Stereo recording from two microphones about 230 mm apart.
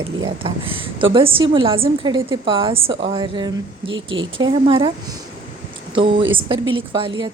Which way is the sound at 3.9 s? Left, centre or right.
Right.